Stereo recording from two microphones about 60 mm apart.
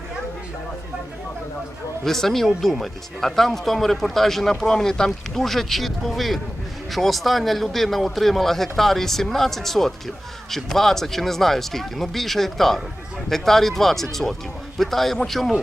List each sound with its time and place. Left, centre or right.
2.0 s speech: centre